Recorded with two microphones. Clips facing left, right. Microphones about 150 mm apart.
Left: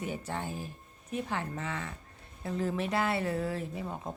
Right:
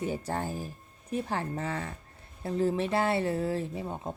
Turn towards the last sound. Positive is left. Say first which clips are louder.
# right 3 dB
turn(degrees=-25)  # may be behind; listen again after turning